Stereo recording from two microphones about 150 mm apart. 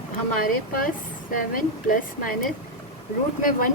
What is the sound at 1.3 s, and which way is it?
A woman's voice, 70° left (ahead or behind).